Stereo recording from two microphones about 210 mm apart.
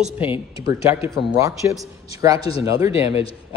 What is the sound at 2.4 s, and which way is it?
Speech, 25° left (ahead or behind).